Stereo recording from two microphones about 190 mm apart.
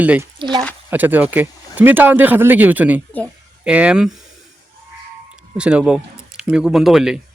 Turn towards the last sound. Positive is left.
turn(degrees=0)  # may be behind; listen again after turning